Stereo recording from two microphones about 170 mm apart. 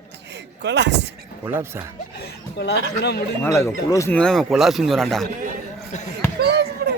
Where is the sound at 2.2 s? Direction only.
75° left (ahead or behind).